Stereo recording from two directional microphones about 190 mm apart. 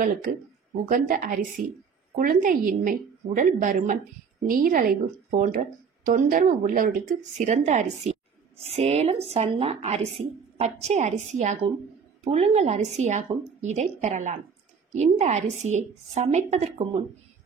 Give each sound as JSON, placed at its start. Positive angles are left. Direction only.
{"t": 0.0, "sound": "a woman's voice", "side_deg": -45}